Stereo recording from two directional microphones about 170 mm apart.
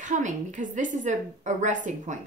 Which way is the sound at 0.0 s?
45° right (ahead or behind).